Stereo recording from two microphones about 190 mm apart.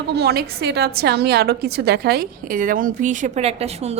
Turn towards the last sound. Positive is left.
turn(degrees=-35)  # may be behind; listen again after turning